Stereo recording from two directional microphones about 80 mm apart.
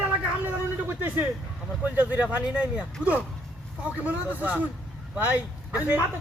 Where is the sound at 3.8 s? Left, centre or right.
Centre.